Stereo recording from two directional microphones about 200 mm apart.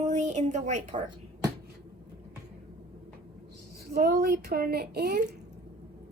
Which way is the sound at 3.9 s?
50° right (ahead or behind).